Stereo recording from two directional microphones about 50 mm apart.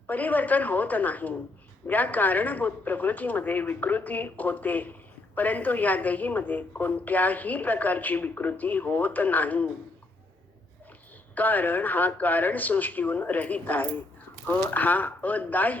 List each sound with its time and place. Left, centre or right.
0.1 s speech: left
11.3 s speech: left